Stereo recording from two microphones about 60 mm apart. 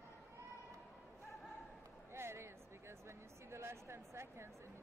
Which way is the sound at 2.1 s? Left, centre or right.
Right.